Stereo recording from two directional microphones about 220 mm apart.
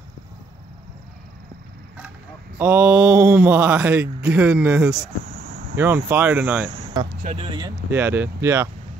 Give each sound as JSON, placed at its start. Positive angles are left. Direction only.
{"t": 2.6, "sound": "speech", "side_deg": -10}
{"t": 6.7, "sound": "a sound", "side_deg": -20}
{"t": 7.3, "sound": "speech", "side_deg": -20}
{"t": 7.9, "sound": "speech", "side_deg": -10}